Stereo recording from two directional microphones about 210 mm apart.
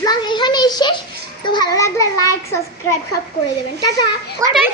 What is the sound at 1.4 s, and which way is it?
Children playing, 20° left (ahead or behind).